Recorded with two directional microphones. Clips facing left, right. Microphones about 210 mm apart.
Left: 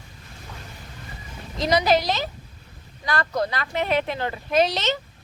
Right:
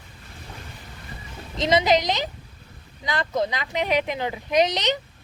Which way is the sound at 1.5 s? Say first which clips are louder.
Even; 20° right (ahead or behind).